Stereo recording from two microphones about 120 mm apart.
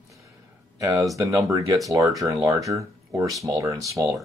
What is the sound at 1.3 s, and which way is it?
Speech, 25° right (ahead or behind).